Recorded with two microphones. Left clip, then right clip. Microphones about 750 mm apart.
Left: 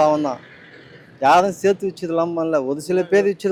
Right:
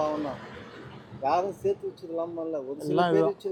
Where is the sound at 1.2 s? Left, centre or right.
Left.